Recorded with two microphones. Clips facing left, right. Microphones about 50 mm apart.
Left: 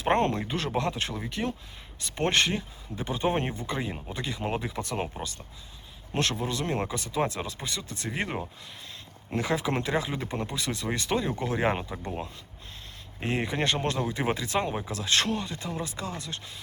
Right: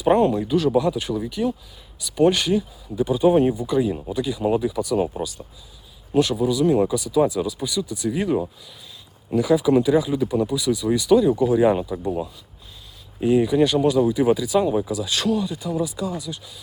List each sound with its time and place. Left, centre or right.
0.0 s speech: left
0.4 s speech: left
1.1 s speech: left
3.8 s speech: left
4.1 s speech: left
6.1 s speech: left
13.2 s speech: left